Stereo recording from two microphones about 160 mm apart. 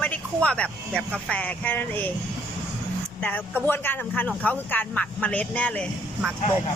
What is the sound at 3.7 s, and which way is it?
Speech, 15° left (ahead or behind).